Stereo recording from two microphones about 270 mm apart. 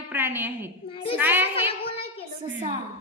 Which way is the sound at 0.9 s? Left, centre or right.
Centre.